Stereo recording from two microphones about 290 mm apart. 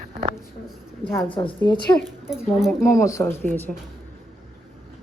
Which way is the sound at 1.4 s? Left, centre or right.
Centre.